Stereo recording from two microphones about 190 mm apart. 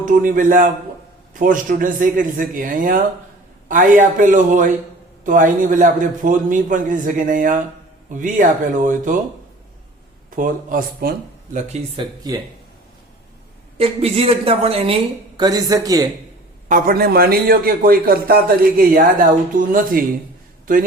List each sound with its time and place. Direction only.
0.0 s a man's voice: 45° right (ahead or behind)
10.3 s a man's voice: 45° right (ahead or behind)
11.9 s a man's voice: 20° right (ahead or behind)
13.7 s a woman's voice: 30° right (ahead or behind)
16.6 s a man's voice: 45° right (ahead or behind)